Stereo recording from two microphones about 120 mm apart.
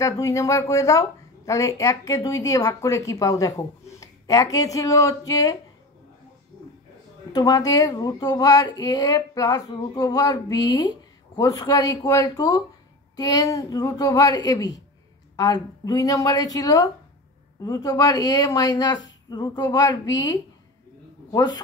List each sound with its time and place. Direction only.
0.0 s a woman's voice: 25° left (ahead or behind)
7.3 s a man's voice: 30° left (ahead or behind)